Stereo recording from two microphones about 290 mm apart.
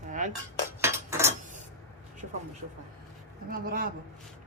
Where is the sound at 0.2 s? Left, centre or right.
Right.